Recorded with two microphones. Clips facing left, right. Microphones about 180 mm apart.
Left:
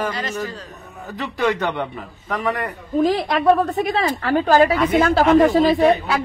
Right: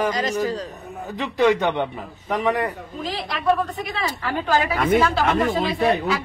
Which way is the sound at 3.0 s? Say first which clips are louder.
Left 6 dB; 50° left (ahead or behind).